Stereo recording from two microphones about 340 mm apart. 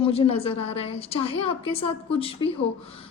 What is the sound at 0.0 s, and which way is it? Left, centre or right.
A woman's voice, centre.